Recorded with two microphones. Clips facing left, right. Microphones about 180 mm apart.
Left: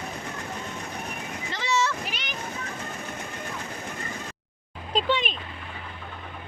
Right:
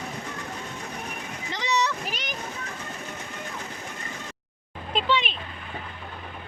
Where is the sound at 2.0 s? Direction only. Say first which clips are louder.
Right 2 dB; 45° right (ahead or behind).